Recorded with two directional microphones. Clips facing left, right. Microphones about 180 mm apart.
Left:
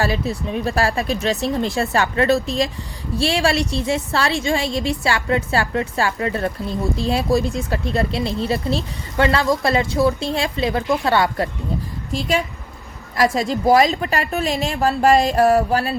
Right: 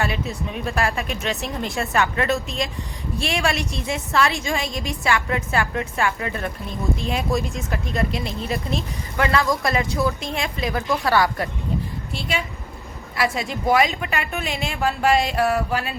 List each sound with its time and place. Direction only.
0.0 s a woman's voice: 35° left (ahead or behind)
13.1 s a woman's voice: 40° left (ahead or behind)